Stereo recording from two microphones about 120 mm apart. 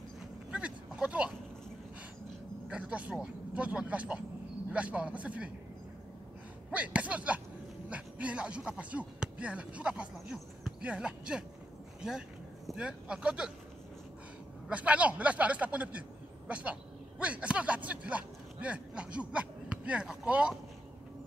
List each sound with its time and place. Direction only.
0.5 s a sound: 10° right (ahead or behind)
2.7 s speech: 10° right (ahead or behind)
6.7 s speech: 10° right (ahead or behind)
14.7 s speech: 10° right (ahead or behind)